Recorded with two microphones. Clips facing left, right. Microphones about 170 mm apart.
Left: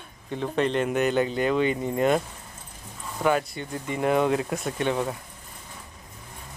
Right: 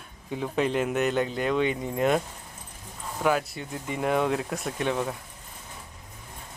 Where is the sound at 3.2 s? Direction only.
Centre (ahead or behind).